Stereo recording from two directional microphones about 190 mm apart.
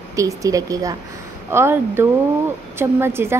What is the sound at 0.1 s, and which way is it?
A woman's voice, 15° right (ahead or behind).